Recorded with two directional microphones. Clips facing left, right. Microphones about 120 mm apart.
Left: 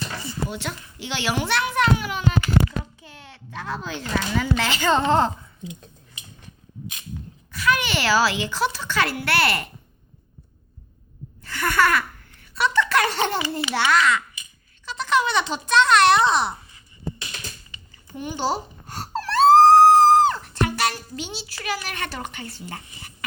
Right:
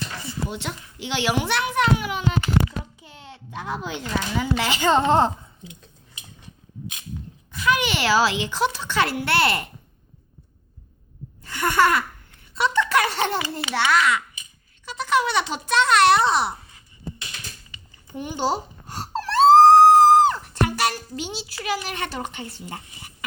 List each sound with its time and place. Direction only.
0.4 s a child's voice: 20° right (ahead or behind)
7.5 s a woman's voice: 20° right (ahead or behind)
11.4 s a sound: 15° right (ahead or behind)
12.5 s speech: 20° right (ahead or behind)
13.1 s a child's voice: centre (ahead or behind)
18.1 s wail: 15° right (ahead or behind)